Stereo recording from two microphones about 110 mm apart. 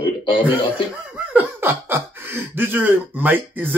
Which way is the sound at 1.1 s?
15° right (ahead or behind).